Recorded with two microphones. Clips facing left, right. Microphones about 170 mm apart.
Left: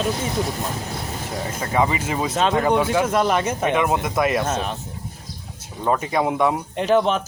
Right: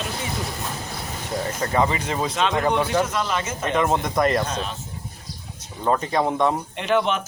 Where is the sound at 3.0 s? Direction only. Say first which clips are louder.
Left 6 dB; 50° left (ahead or behind).